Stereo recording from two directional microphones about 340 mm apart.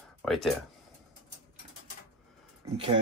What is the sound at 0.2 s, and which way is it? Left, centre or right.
Speech, centre.